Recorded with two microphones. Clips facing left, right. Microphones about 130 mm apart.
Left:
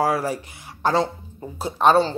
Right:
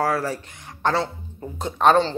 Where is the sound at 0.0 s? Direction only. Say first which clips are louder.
Left 1 dB; 15° left (ahead or behind).